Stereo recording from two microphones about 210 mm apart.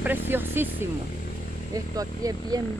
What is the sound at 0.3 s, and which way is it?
Speech, 10° right (ahead or behind).